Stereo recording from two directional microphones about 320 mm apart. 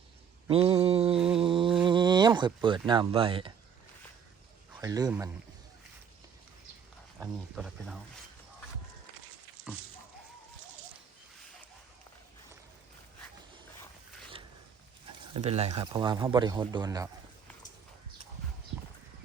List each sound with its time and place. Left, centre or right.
0.4 s mantra: centre
1.4 s a sound: centre
1.8 s speech: centre
4.7 s a man's voice: centre
7.2 s speech: centre
15.3 s speech: centre